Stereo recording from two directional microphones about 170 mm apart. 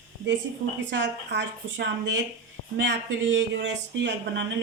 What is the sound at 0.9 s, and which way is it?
A woman's voice, 90° right.